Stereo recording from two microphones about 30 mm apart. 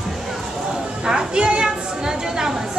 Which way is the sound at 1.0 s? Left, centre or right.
Right.